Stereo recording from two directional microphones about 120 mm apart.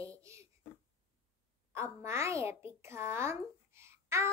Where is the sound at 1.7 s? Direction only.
25° right (ahead or behind).